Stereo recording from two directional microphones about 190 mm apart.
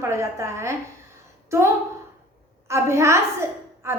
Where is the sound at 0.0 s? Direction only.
15° right (ahead or behind).